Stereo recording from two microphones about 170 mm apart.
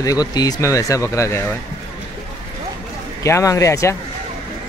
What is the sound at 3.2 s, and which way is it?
Speech, 20° left (ahead or behind).